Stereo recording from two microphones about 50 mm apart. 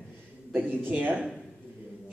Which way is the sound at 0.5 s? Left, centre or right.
Right.